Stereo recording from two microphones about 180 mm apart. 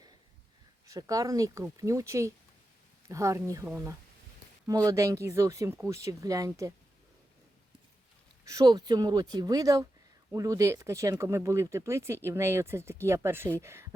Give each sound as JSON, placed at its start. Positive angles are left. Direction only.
{"t": 0.9, "sound": "speech", "side_deg": -20}
{"t": 8.4, "sound": "speech", "side_deg": -20}